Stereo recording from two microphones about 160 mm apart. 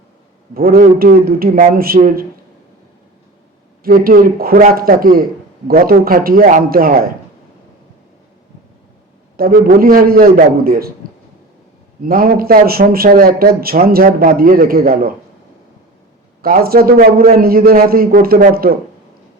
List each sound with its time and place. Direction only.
0.5 s a man's voice: 70° right (ahead or behind)
3.8 s a man's voice: 65° right (ahead or behind)
9.4 s a man's voice: 65° right (ahead or behind)
12.0 s a man's voice: 65° right (ahead or behind)
16.4 s a man's voice: 70° right (ahead or behind)